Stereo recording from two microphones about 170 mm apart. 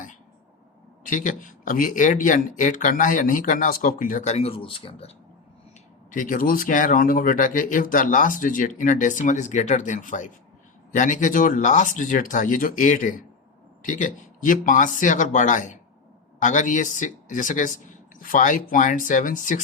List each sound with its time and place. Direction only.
1.0 s speech: 50° left (ahead or behind); by 5.1 s 35° left (ahead or behind)
6.1 s speech: 50° left (ahead or behind)